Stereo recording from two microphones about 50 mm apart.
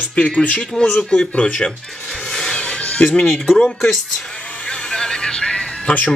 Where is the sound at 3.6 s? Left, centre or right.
Centre.